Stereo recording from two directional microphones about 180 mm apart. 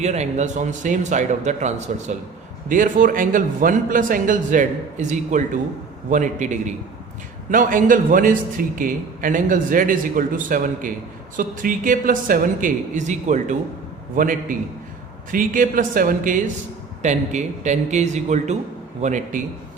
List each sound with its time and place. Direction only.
0.0 s a man's voice: 40° right (ahead or behind)